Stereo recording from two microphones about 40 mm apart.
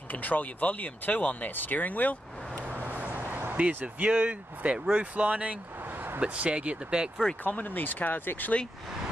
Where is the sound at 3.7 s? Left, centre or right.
Right.